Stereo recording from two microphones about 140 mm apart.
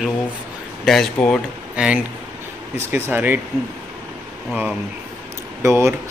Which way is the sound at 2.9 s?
15° right (ahead or behind).